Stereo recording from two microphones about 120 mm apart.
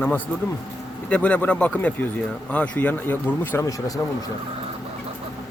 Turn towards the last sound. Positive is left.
turn(degrees=20)  # may be behind; listen again after turning